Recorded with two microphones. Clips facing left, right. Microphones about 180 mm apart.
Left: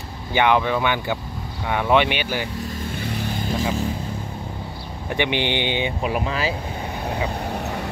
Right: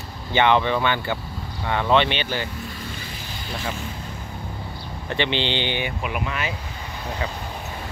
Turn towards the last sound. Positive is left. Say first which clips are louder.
# left 7 dB
turn(degrees=70)  # may be behind; listen again after turning